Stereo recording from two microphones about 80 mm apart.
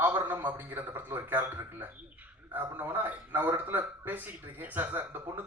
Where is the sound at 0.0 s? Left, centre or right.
Right.